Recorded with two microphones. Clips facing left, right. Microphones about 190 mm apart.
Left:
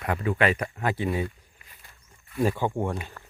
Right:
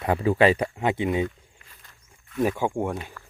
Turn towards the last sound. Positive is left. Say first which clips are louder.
# even
turn(degrees=35)  # may be behind; listen again after turning